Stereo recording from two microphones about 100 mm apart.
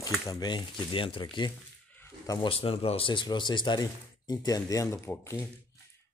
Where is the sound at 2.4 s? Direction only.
70° left (ahead or behind).